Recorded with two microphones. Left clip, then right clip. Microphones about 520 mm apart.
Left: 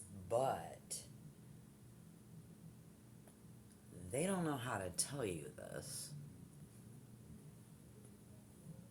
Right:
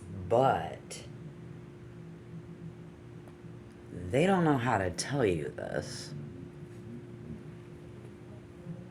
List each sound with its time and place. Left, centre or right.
0.3 s speech: left
4.1 s speech: left